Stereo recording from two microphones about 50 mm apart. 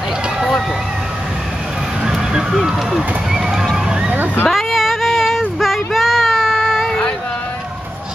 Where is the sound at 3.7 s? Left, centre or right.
Centre.